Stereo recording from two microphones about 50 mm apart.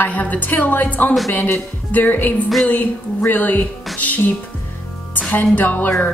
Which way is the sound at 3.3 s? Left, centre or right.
Left.